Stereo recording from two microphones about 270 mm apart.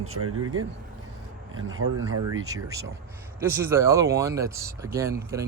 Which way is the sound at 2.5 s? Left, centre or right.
Centre.